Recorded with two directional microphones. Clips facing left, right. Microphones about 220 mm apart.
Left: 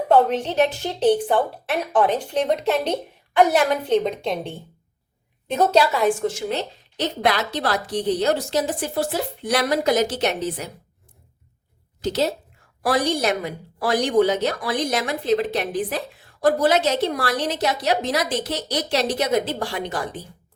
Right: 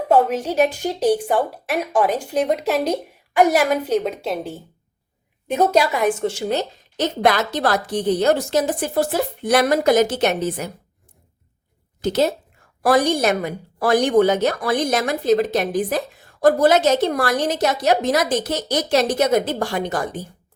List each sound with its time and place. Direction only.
0.1 s a woman's voice: 5° right (ahead or behind); by 6.4 s 25° right (ahead or behind)
6.5 s a woman's voice: 45° right (ahead or behind)
12.0 s a woman's voice: 50° right (ahead or behind)